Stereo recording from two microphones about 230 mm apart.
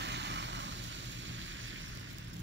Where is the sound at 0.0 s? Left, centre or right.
Right.